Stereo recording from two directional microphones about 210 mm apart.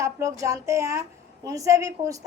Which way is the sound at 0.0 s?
15° right (ahead or behind).